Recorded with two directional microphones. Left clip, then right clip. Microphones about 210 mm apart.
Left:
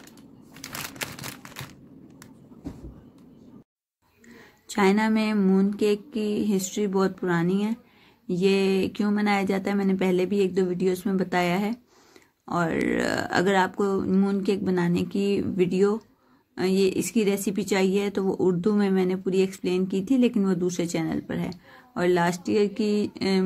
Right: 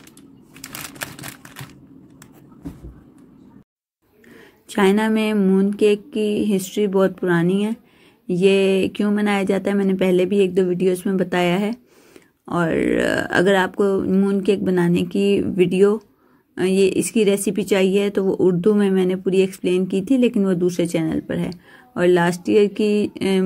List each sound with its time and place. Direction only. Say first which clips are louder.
4.6 s speech: right 5 dB; 15° right (ahead or behind)